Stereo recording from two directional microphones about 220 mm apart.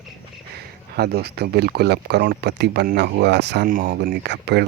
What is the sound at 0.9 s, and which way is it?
Speech, 45° right (ahead or behind).